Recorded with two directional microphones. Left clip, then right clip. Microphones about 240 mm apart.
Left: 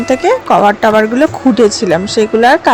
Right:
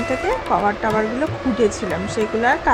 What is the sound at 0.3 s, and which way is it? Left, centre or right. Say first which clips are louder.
A woman's voice: left 11 dB; left.